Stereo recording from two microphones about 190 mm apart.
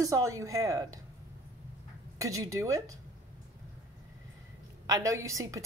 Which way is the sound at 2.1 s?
15° right (ahead or behind).